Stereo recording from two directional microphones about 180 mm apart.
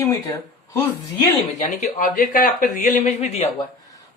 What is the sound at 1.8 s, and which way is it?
Speech, 50° left (ahead or behind).